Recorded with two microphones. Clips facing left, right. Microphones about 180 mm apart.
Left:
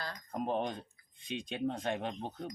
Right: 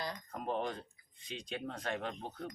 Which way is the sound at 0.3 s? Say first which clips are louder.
Left 4 dB; 25° left (ahead or behind).